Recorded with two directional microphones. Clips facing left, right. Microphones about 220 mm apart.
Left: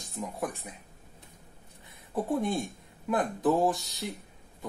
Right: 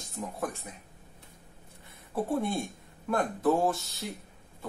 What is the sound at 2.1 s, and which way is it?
Speech, 15° left (ahead or behind).